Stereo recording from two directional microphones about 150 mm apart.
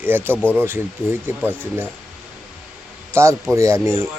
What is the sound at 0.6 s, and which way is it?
Speech, 15° right (ahead or behind).